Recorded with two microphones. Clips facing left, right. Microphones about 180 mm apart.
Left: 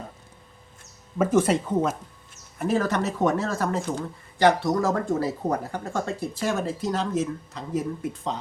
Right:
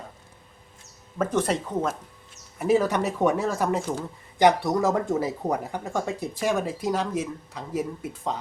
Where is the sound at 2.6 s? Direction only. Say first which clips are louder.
Right 2 dB; 10° right (ahead or behind).